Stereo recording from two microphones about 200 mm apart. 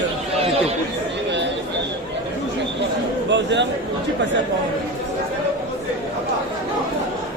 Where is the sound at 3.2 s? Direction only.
65° right (ahead or behind).